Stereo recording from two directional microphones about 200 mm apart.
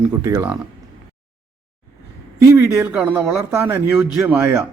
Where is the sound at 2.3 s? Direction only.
15° right (ahead or behind).